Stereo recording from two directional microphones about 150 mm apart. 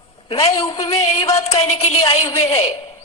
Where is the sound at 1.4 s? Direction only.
40° left (ahead or behind).